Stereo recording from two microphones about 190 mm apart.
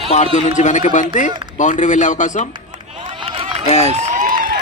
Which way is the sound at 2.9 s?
30° right (ahead or behind).